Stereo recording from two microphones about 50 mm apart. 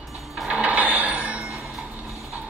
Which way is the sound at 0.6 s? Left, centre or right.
Right.